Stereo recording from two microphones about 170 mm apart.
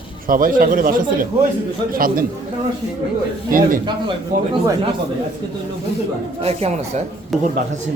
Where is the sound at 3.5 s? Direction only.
55° right (ahead or behind).